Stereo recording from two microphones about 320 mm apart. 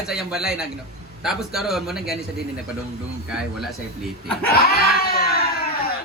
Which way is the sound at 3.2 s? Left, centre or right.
Centre.